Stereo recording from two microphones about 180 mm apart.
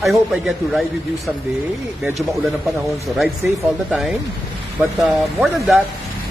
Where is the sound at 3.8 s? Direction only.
Centre (ahead or behind).